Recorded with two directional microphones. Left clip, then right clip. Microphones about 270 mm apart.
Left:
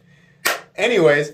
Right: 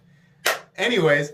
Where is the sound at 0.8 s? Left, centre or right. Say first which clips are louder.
Left 5 dB; centre.